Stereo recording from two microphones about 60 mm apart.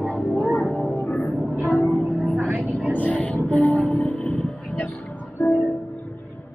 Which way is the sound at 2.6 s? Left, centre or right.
Right.